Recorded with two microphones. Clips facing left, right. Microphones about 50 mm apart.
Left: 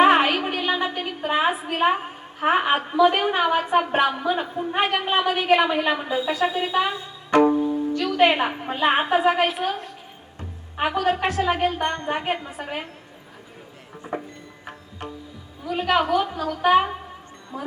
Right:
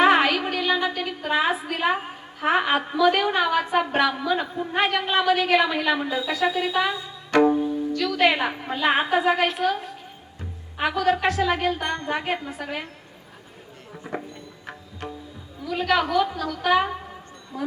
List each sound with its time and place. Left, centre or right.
0.0 s a sound: left
1.7 s a woman's voice: left
7.5 s music: centre
7.9 s a woman's voice: left
10.8 s a woman's voice: left
15.6 s a woman's voice: left